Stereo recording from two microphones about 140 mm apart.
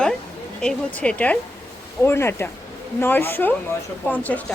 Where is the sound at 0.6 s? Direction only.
10° left (ahead or behind).